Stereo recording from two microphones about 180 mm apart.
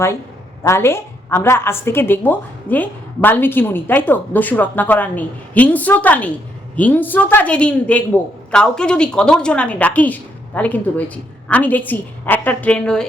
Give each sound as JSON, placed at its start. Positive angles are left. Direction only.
{"t": 0.6, "sound": "a woman's voice", "side_deg": 15}